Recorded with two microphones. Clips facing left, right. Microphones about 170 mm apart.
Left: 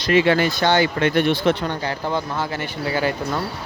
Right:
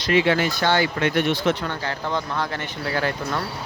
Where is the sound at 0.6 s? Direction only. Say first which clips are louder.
Left 3 dB; 20° left (ahead or behind).